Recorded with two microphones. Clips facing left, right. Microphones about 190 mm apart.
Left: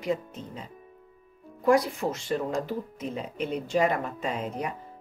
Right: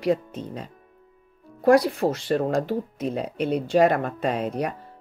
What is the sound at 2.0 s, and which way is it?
Speech, 65° right (ahead or behind).